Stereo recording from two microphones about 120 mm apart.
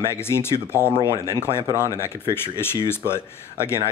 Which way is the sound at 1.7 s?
25° right (ahead or behind).